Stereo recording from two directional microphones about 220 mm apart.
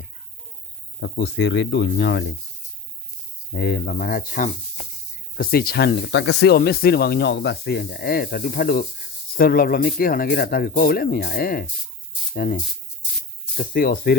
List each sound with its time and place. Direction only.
0.9 s speech: 50° left (ahead or behind)
3.5 s speech: 50° left (ahead or behind)
13.6 s speech: 40° left (ahead or behind)